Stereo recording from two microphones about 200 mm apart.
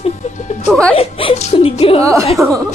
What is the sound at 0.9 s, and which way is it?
Speech, 30° left (ahead or behind).